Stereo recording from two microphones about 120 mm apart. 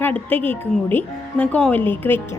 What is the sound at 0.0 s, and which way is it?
A woman's voice, 15° left (ahead or behind).